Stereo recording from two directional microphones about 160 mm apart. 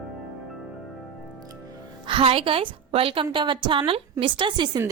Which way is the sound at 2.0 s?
35° right (ahead or behind).